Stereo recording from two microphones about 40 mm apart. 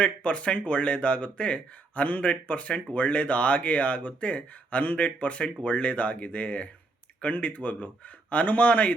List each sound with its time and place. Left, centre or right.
0.0 s speech: left